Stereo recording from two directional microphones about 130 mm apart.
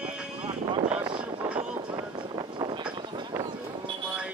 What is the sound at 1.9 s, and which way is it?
Vehicle, 35° right (ahead or behind).